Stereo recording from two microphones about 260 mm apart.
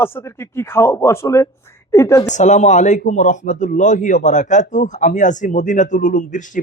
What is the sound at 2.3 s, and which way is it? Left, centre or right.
A man's voice, left.